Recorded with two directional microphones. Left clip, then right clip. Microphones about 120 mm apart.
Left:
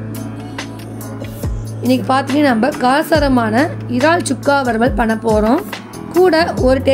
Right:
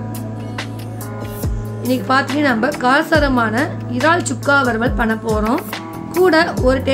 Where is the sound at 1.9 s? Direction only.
35° left (ahead or behind).